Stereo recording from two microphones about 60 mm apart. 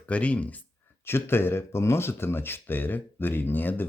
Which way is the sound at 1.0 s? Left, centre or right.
Left.